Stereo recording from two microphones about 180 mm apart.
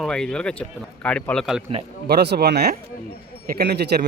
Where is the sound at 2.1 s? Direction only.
65° right (ahead or behind).